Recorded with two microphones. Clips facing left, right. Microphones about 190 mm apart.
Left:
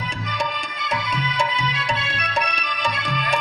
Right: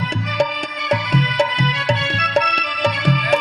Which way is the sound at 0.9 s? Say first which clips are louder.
Right 7 dB; 70° right (ahead or behind).